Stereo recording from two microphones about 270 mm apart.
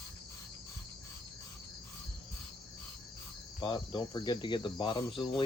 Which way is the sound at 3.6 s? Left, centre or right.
Centre.